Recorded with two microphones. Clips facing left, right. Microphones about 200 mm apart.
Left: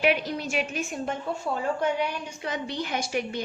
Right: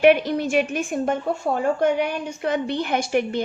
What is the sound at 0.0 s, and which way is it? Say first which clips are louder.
A woman's voice: right 9 dB; 50° right (ahead or behind).